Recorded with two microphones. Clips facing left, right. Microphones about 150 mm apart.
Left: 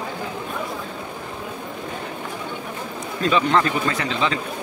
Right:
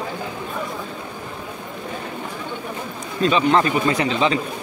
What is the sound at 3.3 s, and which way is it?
Speech, 20° right (ahead or behind).